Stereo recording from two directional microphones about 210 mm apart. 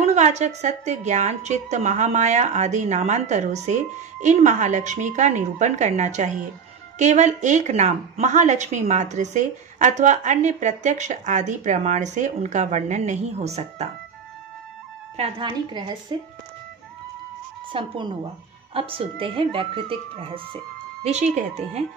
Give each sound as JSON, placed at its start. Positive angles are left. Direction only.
{"t": 0.0, "sound": "a woman's voice", "side_deg": -35}
{"t": 15.1, "sound": "a woman's voice", "side_deg": -25}
{"t": 17.7, "sound": "a woman's voice", "side_deg": -25}